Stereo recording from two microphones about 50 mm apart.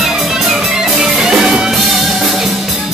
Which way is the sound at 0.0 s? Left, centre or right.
Centre.